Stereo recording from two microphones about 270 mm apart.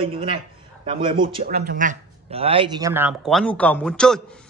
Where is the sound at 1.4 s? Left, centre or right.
Right.